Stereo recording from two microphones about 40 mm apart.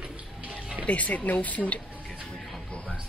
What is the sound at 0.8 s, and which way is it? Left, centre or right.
Speech, left.